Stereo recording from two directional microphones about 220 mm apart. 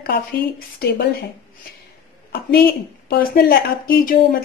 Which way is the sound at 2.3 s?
45° left (ahead or behind).